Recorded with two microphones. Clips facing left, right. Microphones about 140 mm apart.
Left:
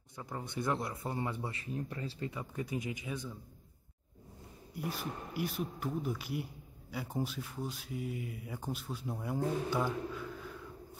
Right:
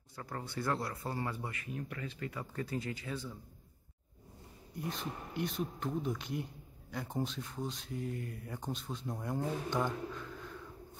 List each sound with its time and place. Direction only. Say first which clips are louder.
0.1 s speech: left 1 dB; 15° left (ahead or behind)
2.5 s speech: right 1 dB; 15° left (ahead or behind)
4.8 s speech: left 1 dB; 5° left (ahead or behind)